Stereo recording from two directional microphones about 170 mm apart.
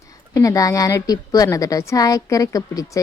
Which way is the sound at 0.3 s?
20° left (ahead or behind).